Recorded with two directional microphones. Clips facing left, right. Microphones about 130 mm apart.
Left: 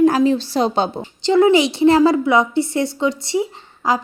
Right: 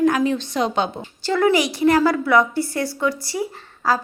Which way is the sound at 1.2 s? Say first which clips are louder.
Left 5 dB; 20° left (ahead or behind).